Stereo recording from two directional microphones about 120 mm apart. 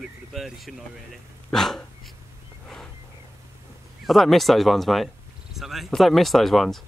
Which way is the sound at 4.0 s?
Centre (ahead or behind).